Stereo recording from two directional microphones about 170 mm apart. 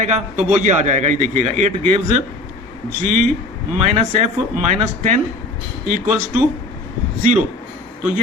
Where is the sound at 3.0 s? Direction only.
45° right (ahead or behind).